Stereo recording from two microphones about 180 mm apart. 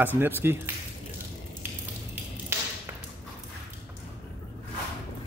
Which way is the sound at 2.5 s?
15° right (ahead or behind).